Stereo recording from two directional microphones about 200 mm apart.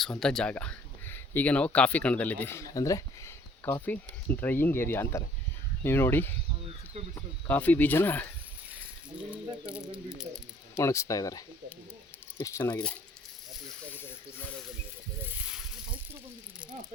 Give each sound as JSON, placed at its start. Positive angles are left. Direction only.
{"t": 0.0, "sound": "speech", "side_deg": 5}
{"t": 7.4, "sound": "speech", "side_deg": 10}
{"t": 9.9, "sound": "speech", "side_deg": -5}
{"t": 10.8, "sound": "speech", "side_deg": 15}